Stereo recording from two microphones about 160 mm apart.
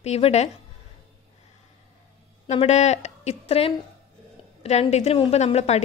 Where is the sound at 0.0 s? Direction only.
40° left (ahead or behind).